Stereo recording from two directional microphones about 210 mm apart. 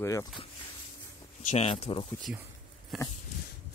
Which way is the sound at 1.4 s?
30° left (ahead or behind).